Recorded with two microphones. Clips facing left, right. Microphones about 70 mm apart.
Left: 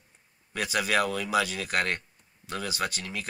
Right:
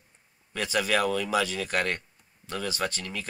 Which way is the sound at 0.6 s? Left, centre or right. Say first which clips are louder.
Even; centre.